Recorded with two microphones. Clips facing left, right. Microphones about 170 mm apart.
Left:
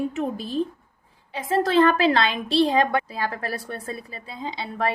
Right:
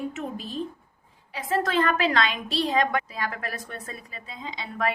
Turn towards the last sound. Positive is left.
turn(degrees=30)  # may be behind; listen again after turning